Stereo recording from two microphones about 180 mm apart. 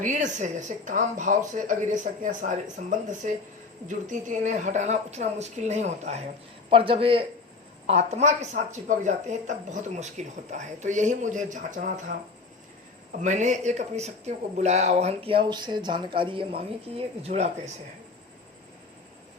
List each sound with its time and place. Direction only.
0.0 s speech: 45° right (ahead or behind)
13.2 s speech: 40° right (ahead or behind)